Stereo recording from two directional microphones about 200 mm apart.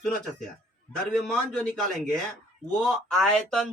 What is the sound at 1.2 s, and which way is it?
Speech, 5° left (ahead or behind).